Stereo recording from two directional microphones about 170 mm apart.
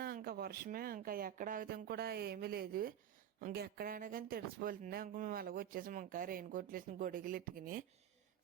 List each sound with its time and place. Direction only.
0.0 s speech: 60° right (ahead or behind)